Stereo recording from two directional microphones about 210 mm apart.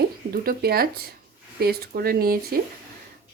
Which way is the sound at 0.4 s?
45° right (ahead or behind).